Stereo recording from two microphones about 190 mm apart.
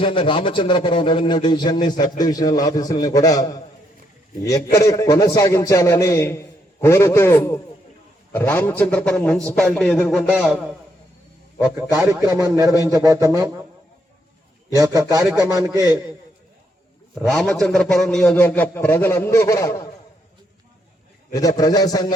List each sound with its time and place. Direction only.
0.0 s a man's voice: 25° left (ahead or behind); by 10.7 s centre (ahead or behind)
11.9 s speech: 15° right (ahead or behind)
14.8 s speech: 20° right (ahead or behind)
17.2 s a man's voice: centre (ahead or behind); by 19.9 s 20° left (ahead or behind)
21.3 s a man's voice: 20° left (ahead or behind)